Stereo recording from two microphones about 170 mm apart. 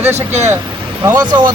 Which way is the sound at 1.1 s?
25° right (ahead or behind).